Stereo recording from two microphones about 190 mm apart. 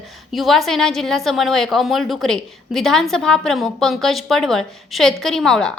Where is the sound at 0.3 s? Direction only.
Centre (ahead or behind).